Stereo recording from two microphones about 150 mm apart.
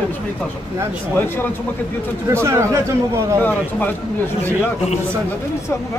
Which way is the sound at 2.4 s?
20° right (ahead or behind).